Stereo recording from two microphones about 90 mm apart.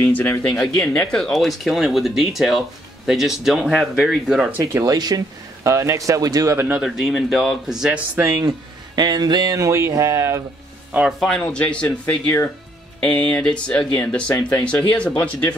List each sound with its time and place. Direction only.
0.0 s speech: 20° left (ahead or behind); by 4.5 s 5° right (ahead or behind)
4.7 s speech: 45° right (ahead or behind)
6.7 s speech: 5° right (ahead or behind)
8.2 s speech: 40° right (ahead or behind)
11.1 s speech: centre (ahead or behind)
11.4 s speech: 15° left (ahead or behind)